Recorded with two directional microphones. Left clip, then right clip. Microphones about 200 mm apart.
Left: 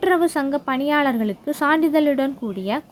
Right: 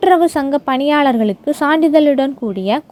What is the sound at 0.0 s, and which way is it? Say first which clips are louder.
A woman's voice: right 7 dB; 25° right (ahead or behind).